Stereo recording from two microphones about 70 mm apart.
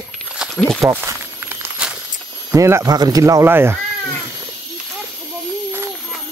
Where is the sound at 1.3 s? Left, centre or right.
Right.